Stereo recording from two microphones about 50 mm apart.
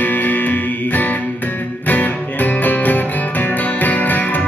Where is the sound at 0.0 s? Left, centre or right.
Left.